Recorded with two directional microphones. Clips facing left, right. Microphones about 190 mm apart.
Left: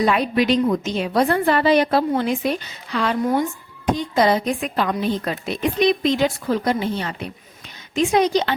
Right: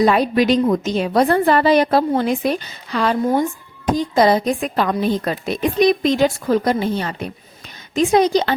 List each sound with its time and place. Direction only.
0.0 s a woman's voice: 40° right (ahead or behind)